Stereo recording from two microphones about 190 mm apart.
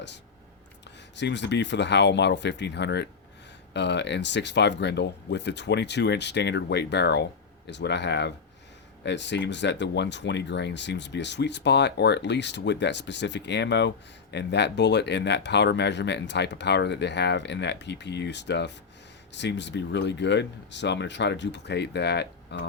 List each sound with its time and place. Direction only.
1.1 s speech: 65° left (ahead or behind)